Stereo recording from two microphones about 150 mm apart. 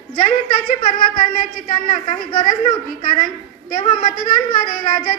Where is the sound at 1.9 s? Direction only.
35° left (ahead or behind).